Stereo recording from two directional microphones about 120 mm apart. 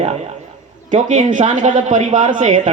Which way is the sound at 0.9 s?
90° right.